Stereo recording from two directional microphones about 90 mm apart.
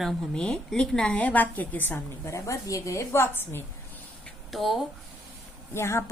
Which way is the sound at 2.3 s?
35° left (ahead or behind).